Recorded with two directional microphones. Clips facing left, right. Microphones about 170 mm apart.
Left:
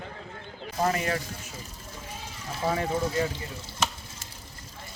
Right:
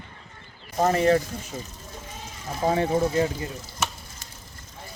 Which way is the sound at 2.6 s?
30° right (ahead or behind).